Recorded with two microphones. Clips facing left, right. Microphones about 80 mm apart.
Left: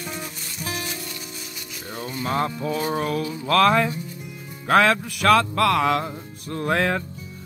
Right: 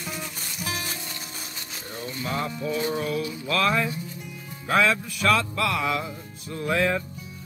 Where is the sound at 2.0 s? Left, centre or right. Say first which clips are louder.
Left 5 dB; left.